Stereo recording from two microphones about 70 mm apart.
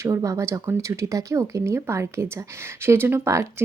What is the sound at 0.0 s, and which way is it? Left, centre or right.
Speech, right.